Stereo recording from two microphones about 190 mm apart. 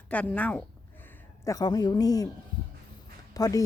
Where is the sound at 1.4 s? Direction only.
20° left (ahead or behind).